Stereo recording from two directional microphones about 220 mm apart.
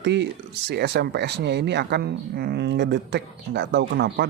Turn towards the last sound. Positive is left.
turn(degrees=-50)  # may be behind; listen again after turning